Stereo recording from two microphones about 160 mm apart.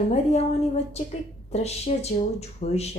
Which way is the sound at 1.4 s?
40° left (ahead or behind).